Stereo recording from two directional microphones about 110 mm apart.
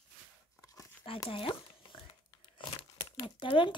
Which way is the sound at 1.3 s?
50° left (ahead or behind).